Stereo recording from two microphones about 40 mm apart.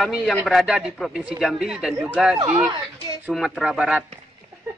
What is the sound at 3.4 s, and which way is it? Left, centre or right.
Speech, centre.